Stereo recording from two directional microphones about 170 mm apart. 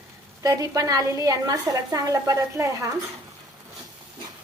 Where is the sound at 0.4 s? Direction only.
20° right (ahead or behind).